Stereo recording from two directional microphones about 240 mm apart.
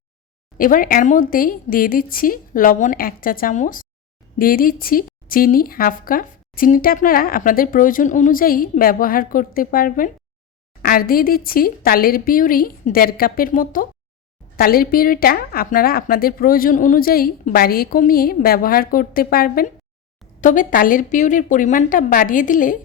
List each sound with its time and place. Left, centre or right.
0.6 s a woman's voice: left